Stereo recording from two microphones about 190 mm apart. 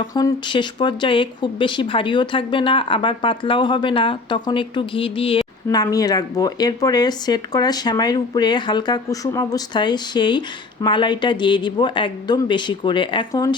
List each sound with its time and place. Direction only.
0.0 s speech: 20° left (ahead or behind)
5.6 s speech: 20° left (ahead or behind)